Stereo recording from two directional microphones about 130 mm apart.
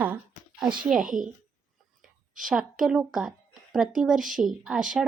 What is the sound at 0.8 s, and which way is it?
Speech, 5° right (ahead or behind).